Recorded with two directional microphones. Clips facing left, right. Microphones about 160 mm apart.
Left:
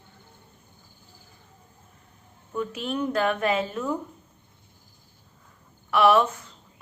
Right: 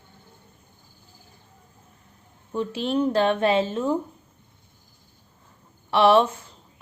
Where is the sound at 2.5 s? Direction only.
30° right (ahead or behind).